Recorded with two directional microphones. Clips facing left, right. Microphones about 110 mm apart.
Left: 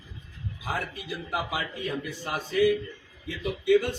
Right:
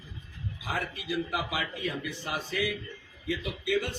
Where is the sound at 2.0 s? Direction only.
40° left (ahead or behind).